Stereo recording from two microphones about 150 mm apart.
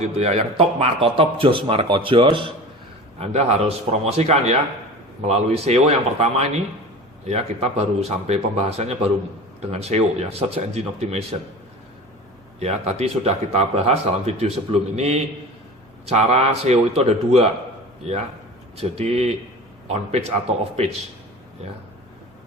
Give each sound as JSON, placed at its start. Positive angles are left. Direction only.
{"t": 0.0, "sound": "speech", "side_deg": -45}
{"t": 3.2, "sound": "speech", "side_deg": -45}
{"t": 12.5, "sound": "speech", "side_deg": -45}